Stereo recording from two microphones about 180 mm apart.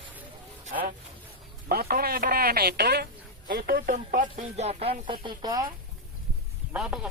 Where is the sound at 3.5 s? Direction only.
55° right (ahead or behind); by 5.7 s 25° right (ahead or behind).